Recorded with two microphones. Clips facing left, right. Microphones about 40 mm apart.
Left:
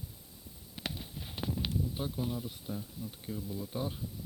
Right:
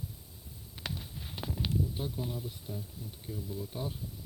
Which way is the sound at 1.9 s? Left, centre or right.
Centre.